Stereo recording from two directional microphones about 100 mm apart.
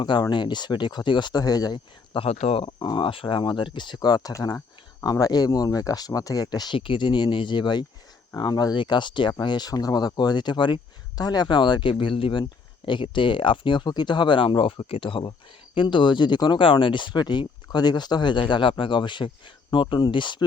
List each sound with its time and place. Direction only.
0.0 s speech: 50° left (ahead or behind)
2.1 s speech: 80° left
2.7 s speech: 45° left (ahead or behind)
6.7 s speech: 55° left (ahead or behind)